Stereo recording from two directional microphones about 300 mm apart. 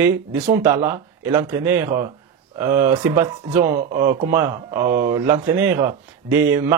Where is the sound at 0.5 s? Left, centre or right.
Right.